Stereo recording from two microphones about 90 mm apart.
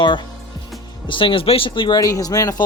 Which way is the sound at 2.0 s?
40° left (ahead or behind).